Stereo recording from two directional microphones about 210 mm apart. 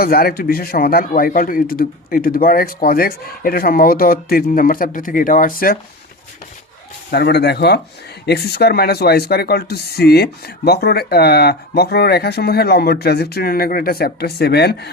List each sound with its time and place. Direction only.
0.0 s speech: 45° left (ahead or behind)
7.1 s speech: 50° left (ahead or behind)